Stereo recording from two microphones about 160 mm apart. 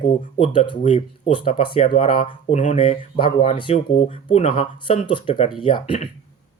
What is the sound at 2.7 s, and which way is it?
Speech, 35° left (ahead or behind).